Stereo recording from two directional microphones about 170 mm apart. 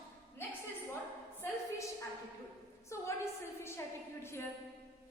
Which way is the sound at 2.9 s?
15° left (ahead or behind).